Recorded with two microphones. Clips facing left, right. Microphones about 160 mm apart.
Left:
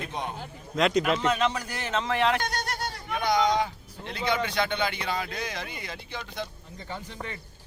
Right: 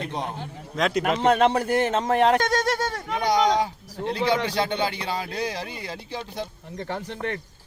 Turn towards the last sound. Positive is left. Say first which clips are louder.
# right 8 dB
turn(degrees=-70)  # may be behind; listen again after turning